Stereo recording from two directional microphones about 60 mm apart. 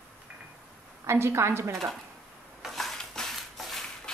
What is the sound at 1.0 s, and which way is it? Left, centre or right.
Speech, right.